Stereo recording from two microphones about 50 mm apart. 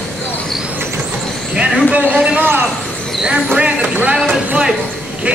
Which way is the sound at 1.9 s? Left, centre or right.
Right.